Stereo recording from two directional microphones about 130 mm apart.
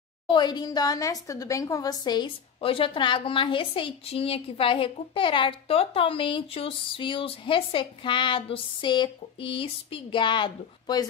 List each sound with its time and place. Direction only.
0.3 s a woman's voice: 35° left (ahead or behind)